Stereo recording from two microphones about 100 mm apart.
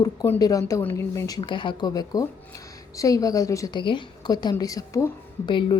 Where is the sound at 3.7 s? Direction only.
55° left (ahead or behind).